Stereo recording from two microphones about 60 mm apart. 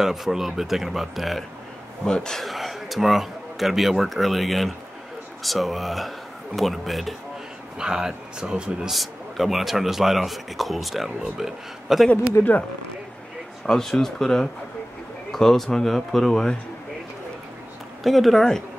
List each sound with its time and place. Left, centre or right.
0.0 s speech: centre
2.0 s speech: centre
2.4 s a man's voice: centre
7.8 s speech: centre
8.9 s speech: centre
12.4 s speech: left
13.7 s speech: centre
18.0 s speech: centre